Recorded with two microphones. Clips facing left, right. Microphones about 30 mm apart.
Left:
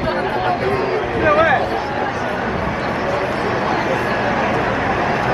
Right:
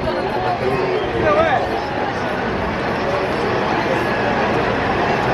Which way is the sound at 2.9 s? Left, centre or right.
Right.